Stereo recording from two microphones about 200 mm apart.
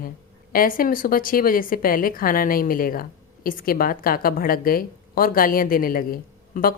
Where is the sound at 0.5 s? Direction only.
45° left (ahead or behind).